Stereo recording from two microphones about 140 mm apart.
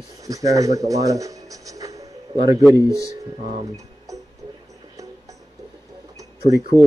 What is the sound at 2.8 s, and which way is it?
Speech, 25° left (ahead or behind).